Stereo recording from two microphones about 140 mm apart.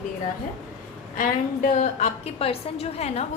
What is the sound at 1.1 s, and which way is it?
Speech, 70° left (ahead or behind).